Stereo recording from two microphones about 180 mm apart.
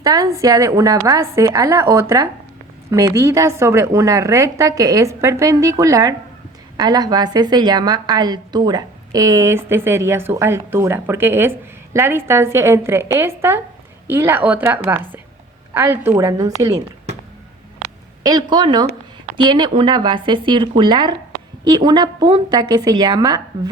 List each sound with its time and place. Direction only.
0.0 s a woman's voice: 20° right (ahead or behind)
18.2 s speech: 20° right (ahead or behind)